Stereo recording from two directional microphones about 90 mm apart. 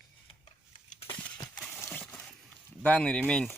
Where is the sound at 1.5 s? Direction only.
5° left (ahead or behind).